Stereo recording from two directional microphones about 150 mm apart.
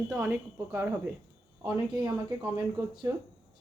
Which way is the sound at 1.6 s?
30° right (ahead or behind).